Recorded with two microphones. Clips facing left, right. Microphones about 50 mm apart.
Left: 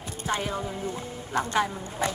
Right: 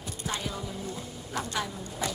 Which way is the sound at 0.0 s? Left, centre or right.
Left.